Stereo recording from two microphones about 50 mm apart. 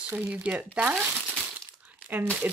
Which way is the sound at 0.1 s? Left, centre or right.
Right.